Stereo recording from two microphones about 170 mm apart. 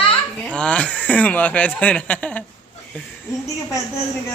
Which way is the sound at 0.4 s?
5° left (ahead or behind).